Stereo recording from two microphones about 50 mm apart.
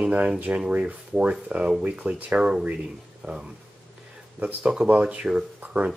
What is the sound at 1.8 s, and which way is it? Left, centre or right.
Speech, right.